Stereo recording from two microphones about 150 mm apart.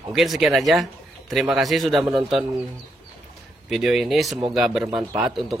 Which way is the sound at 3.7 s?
Centre (ahead or behind).